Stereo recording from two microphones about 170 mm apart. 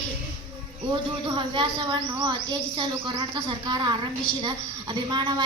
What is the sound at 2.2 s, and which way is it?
A woman's voice, 25° right (ahead or behind).